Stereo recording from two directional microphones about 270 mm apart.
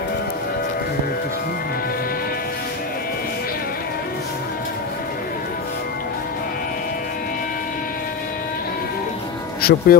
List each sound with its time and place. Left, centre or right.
9.6 s speech: left